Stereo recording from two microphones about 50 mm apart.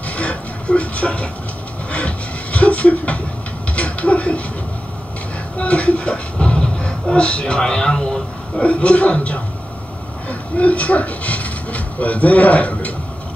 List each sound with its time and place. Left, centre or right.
0.1 s a sound: left
1.9 s music: left
3.7 s a sound: left
5.6 s speech: left
8.6 s a man's voice: left
10.6 s speech: left